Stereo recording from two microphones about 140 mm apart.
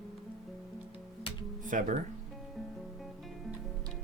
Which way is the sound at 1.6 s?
65° right (ahead or behind).